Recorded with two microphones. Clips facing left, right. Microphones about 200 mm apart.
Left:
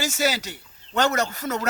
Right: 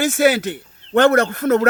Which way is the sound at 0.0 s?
55° right (ahead or behind).